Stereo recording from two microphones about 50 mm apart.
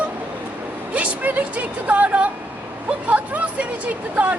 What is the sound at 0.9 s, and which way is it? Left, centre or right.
A woman's voice, right.